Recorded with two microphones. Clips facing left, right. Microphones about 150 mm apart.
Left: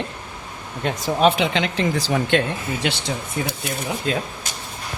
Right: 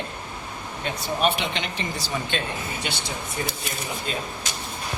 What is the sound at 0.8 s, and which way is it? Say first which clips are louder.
Speech: left 6 dB; 90° left.